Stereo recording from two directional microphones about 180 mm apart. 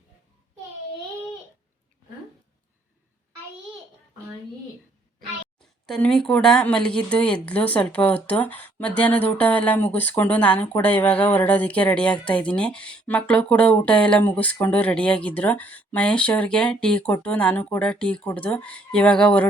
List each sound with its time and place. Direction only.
5.8 s speech: 5° left (ahead or behind)